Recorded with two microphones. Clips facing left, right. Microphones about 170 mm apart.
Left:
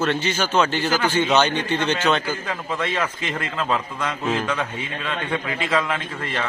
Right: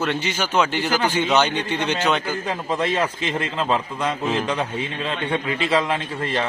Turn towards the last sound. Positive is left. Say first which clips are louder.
# right 3 dB
turn(degrees=-35)  # may be behind; listen again after turning